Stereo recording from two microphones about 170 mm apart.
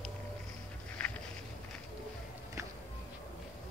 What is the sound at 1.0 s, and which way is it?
Walk, 5° left (ahead or behind).